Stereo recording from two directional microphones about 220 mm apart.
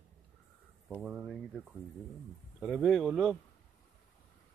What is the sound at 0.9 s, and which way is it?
Speech, centre (ahead or behind).